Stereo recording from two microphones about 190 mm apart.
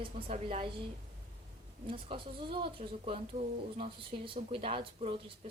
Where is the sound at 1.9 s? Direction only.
25° right (ahead or behind).